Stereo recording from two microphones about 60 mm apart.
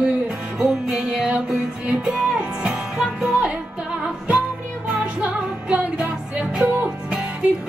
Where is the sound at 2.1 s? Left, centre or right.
Centre.